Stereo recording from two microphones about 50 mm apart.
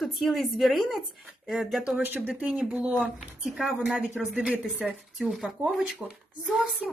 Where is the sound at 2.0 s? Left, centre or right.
Right.